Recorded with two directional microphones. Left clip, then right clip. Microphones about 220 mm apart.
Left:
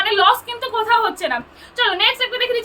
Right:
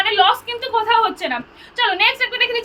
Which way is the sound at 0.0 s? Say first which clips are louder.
Even; 15° left (ahead or behind).